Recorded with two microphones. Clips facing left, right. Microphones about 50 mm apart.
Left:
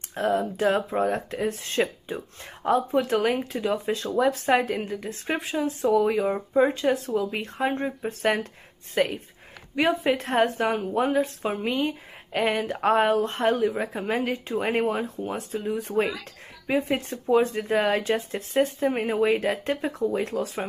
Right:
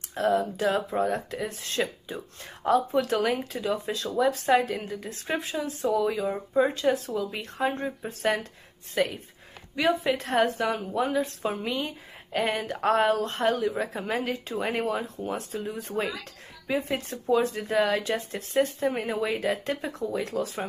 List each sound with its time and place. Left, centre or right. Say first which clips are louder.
0.2 s speech: left 1 dB; left
4.8 s speech: left 3 dB; left
14.6 s speech: left 3 dB; left
18.1 s speech: left 2 dB; centre